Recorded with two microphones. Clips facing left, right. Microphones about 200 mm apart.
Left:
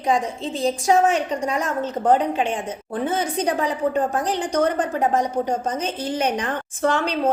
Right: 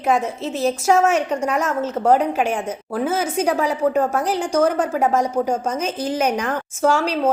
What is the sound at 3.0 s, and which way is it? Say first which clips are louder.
A woman's voice: right 2 dB; 5° right (ahead or behind).